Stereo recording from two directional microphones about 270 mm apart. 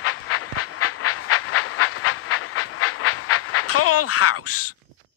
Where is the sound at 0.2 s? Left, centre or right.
Left.